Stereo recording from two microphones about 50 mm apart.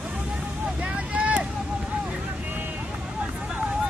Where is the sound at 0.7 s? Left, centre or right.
Right.